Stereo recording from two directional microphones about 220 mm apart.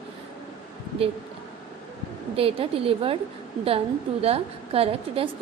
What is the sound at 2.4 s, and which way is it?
A woman's voice, 25° right (ahead or behind).